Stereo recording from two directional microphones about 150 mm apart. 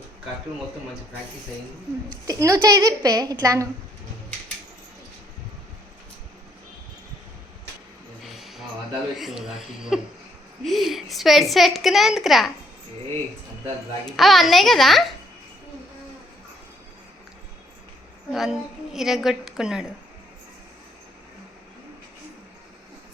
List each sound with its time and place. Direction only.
2.2 s a woman's voice: 20° right (ahead or behind)
8.2 s a sound: centre (ahead or behind)
9.1 s a woman's voice: centre (ahead or behind)
14.0 s a woman's voice: centre (ahead or behind)
18.3 s a woman's voice: centre (ahead or behind)